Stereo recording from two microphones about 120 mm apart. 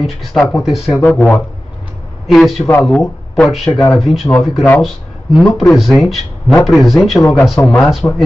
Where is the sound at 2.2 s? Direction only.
Centre (ahead or behind).